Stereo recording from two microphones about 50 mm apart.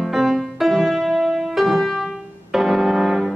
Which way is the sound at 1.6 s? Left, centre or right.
Centre.